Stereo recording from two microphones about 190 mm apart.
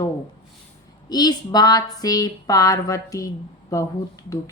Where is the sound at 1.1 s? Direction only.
20° left (ahead or behind).